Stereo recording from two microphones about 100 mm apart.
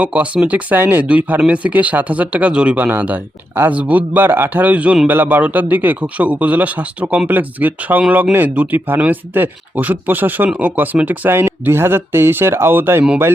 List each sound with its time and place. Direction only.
0.0 s speech: 10° right (ahead or behind)